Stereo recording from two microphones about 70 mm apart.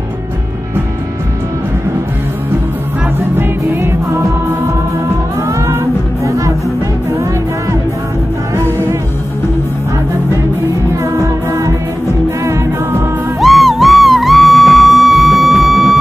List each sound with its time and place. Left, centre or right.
3.2 s music: right
6.2 s music: right
8.5 s music: right
11.1 s music: right
13.4 s music: centre